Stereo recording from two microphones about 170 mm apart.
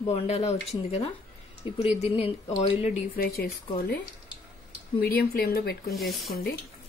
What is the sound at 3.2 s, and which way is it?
Speech, 60° left (ahead or behind).